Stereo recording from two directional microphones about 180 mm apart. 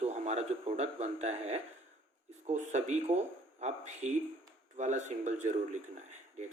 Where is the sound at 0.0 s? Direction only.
35° right (ahead or behind).